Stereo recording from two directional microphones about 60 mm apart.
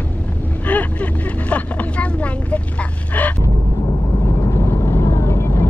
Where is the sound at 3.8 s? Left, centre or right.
Left.